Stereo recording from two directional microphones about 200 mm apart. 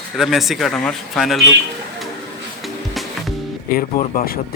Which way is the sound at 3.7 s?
45° left (ahead or behind).